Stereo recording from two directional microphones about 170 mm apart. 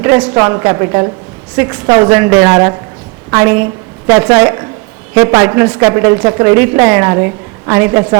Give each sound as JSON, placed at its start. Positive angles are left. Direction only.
{"t": 0.0, "sound": "a woman's voice", "side_deg": -20}